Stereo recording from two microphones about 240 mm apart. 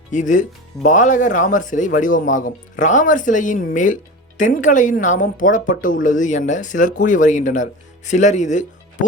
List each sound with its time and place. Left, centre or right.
0.1 s speech: left